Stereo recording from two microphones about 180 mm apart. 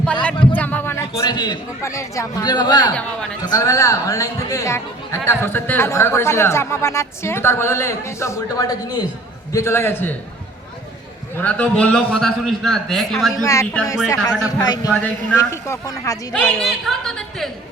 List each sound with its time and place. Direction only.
0.0 s a sound: 5° left (ahead or behind)
1.3 s a man's voice: 25° left (ahead or behind)
11.3 s a man's voice: 5° left (ahead or behind)
13.4 s a man's voice: 15° left (ahead or behind)
16.3 s a man's voice: 5° left (ahead or behind)